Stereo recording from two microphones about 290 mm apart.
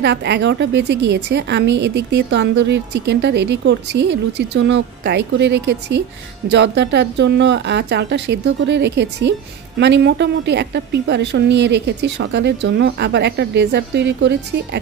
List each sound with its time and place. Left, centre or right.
0.0 s a woman's voice: right